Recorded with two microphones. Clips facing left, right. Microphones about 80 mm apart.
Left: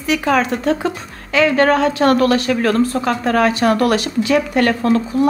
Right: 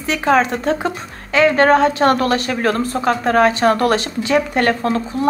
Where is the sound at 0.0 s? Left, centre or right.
Right.